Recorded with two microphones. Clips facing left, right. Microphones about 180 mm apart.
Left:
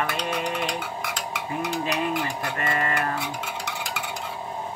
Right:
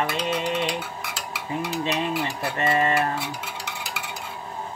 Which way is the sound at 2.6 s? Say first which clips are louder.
Right 5 dB; 30° right (ahead or behind).